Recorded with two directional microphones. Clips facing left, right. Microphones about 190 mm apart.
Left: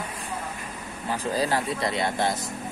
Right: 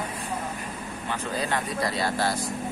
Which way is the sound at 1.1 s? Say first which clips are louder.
Left 4 dB; 35° left (ahead or behind).